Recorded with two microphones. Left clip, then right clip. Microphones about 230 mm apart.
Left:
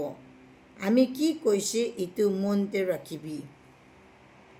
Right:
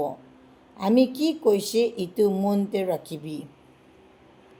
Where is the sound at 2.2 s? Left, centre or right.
Right.